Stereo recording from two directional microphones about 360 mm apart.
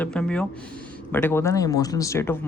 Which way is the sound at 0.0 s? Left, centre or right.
Centre.